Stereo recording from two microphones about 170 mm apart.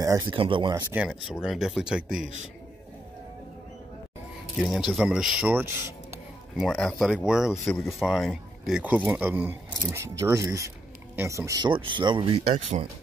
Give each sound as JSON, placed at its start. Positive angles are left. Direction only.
{"t": 0.0, "sound": "speech", "side_deg": -20}
{"t": 0.3, "sound": "speech", "side_deg": -30}
{"t": 0.7, "sound": "speech", "side_deg": -10}
{"t": 4.6, "sound": "speech", "side_deg": 0}
{"t": 6.5, "sound": "speech", "side_deg": 0}